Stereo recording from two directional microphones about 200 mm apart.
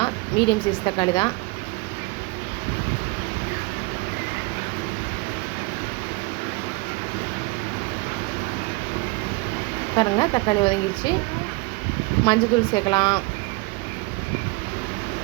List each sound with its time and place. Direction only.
0.0 s a sound: 25° left (ahead or behind)
0.9 s speech: 20° left (ahead or behind)
10.0 s speech: 20° left (ahead or behind)
12.2 s speech: 20° left (ahead or behind)